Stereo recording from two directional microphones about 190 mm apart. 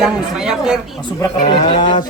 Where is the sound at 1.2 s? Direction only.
25° left (ahead or behind).